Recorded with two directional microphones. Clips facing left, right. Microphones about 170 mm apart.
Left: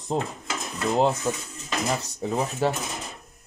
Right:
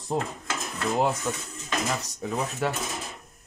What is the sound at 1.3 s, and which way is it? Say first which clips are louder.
Speech: left 2 dB; 30° left (ahead or behind).